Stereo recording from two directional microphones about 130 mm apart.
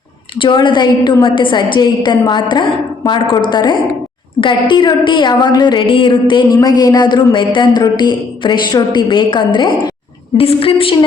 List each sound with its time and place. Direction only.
0.3 s speech: 40° left (ahead or behind)
10.3 s a woman's voice: 50° left (ahead or behind)